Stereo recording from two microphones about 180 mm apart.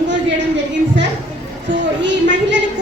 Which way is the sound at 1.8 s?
85° right.